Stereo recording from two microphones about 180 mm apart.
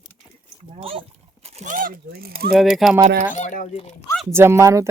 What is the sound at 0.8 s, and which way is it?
Speech, 30° right (ahead or behind).